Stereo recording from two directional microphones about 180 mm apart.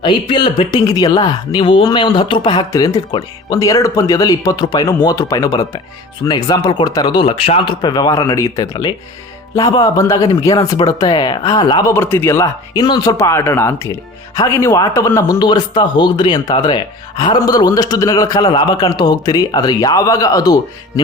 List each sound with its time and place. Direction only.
0.0 s a man's voice: 25° left (ahead or behind)